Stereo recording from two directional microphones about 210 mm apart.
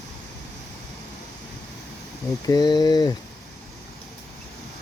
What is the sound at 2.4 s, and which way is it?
Speech, 20° left (ahead or behind).